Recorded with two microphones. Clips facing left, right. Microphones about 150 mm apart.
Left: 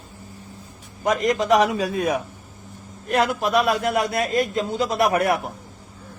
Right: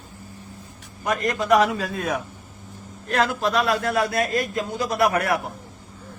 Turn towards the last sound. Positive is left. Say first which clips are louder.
# left 1 dB
turn(degrees=20)  # may be behind; listen again after turning